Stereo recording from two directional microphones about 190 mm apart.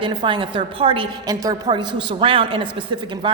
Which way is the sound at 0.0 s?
25° right (ahead or behind).